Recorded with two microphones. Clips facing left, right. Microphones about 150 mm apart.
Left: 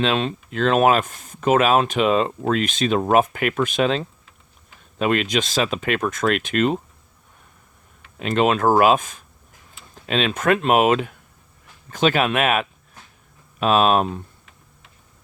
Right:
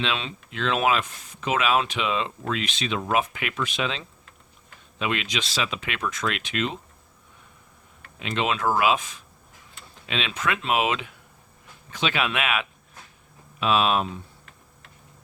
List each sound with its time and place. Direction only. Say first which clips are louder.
0.0 s speech: left 8 dB; 45° left (ahead or behind)
8.2 s speech: left 7 dB; 45° left (ahead or behind)